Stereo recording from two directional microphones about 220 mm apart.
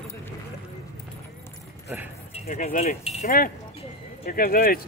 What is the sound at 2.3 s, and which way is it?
Speech, 35° left (ahead or behind).